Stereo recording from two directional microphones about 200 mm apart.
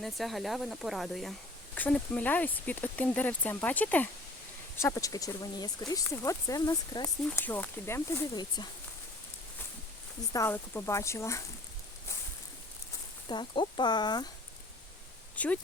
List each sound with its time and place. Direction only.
0.0 s speech: centre (ahead or behind); by 8.7 s 20° left (ahead or behind)
10.3 s speech: 15° left (ahead or behind)
13.2 s speech: 25° left (ahead or behind)
15.4 s speech: 5° left (ahead or behind)